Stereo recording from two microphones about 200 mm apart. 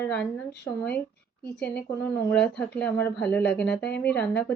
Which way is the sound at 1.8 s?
10° left (ahead or behind).